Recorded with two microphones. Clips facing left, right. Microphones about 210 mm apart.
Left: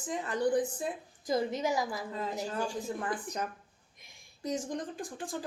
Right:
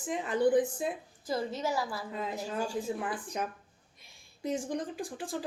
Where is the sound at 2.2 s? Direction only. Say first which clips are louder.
Even; 10° right (ahead or behind).